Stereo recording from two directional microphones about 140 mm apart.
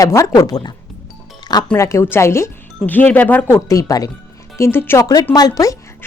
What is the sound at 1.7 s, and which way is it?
Speech, 20° left (ahead or behind).